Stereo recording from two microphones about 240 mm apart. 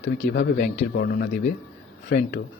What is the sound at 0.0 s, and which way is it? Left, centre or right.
Speech, left.